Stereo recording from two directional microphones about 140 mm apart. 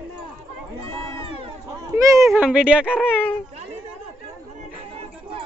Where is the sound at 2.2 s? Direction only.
5° right (ahead or behind).